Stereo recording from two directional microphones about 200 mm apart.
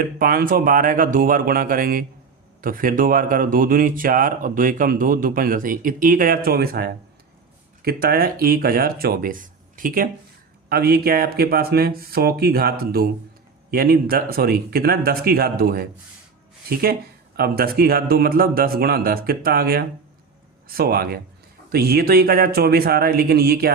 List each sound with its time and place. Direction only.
0.0 s speech: 50° right (ahead or behind)